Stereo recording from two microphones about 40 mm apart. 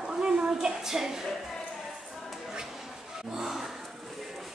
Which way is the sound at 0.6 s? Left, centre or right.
Centre.